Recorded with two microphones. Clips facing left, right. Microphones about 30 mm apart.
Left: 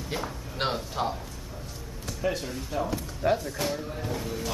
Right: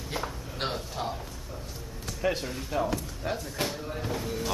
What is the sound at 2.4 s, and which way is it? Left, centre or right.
Speech, centre.